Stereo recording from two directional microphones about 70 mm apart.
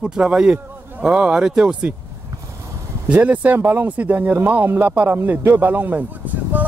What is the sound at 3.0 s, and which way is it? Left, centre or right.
Speech, right.